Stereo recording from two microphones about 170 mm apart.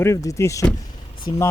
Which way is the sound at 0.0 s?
15° left (ahead or behind).